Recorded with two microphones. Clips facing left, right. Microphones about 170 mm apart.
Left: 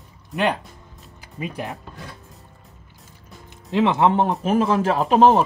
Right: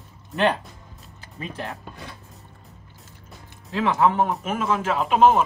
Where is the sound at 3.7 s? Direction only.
20° left (ahead or behind).